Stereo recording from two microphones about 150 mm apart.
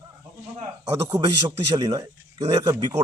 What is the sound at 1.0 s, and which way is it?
A man's voice, 25° right (ahead or behind).